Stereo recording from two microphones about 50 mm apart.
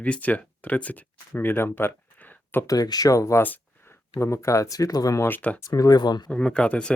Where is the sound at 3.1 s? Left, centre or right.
Left.